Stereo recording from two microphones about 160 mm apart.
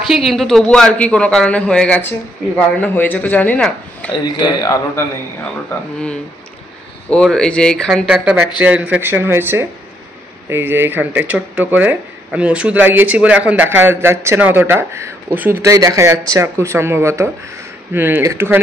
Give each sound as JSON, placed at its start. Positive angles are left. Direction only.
{"t": 0.0, "sound": "a man's voice", "side_deg": 0}
{"t": 4.1, "sound": "speech", "side_deg": 25}
{"t": 5.4, "sound": "a man's voice", "side_deg": 5}